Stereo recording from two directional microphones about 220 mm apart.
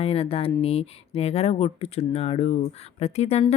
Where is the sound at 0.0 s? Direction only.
25° left (ahead or behind).